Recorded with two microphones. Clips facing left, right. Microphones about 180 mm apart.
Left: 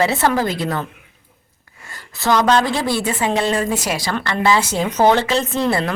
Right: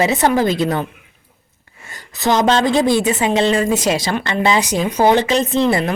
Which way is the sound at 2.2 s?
20° right (ahead or behind).